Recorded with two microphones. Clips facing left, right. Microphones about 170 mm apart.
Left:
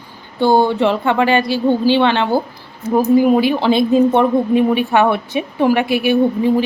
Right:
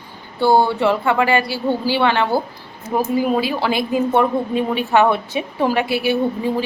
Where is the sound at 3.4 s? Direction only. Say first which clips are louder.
Left 6 dB; 20° left (ahead or behind).